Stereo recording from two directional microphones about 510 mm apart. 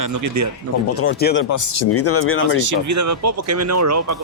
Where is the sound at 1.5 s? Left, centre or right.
Left.